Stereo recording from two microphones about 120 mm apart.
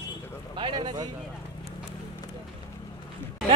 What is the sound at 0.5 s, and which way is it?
Speech, 40° right (ahead or behind).